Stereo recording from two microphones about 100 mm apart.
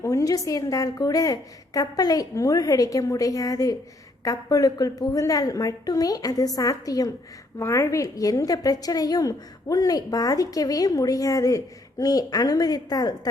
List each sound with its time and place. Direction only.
0.0 s a woman's voice: 30° left (ahead or behind)